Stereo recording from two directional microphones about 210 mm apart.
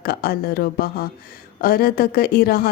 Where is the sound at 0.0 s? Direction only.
45° left (ahead or behind).